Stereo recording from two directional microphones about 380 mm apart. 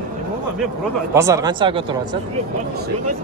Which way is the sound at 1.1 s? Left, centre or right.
Centre.